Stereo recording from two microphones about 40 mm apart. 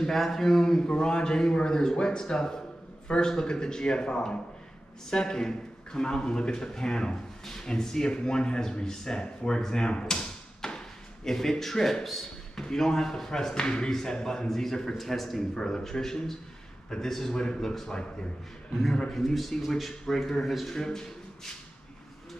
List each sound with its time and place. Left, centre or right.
0.0 s a man's voice: centre; by 9.6 s left
9.6 s arrow: centre
11.2 s speech: centre
19.3 s speech: centre
20.7 s speech: centre